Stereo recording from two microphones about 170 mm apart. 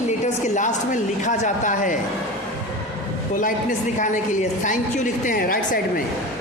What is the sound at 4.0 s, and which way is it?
Speech, 45° left (ahead or behind).